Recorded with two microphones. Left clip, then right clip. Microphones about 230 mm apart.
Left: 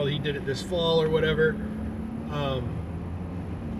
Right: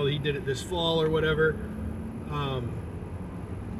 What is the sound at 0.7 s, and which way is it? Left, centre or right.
Speech, centre.